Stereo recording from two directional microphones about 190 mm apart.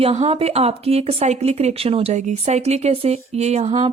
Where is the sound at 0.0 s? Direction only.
30° right (ahead or behind).